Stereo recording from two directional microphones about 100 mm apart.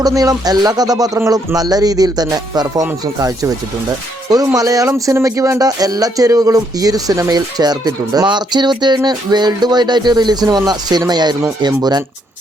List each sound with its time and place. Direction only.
0.0 s speech: 35° right (ahead or behind)